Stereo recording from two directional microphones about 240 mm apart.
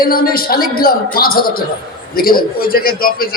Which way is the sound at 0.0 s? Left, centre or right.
Left.